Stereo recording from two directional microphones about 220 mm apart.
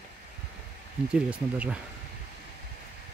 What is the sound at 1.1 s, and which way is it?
Speech, 5° right (ahead or behind).